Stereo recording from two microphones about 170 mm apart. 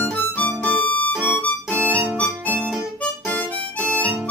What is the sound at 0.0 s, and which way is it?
Music, 10° left (ahead or behind).